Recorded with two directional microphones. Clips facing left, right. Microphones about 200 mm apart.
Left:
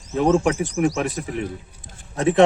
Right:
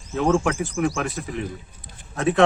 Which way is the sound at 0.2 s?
20° left (ahead or behind).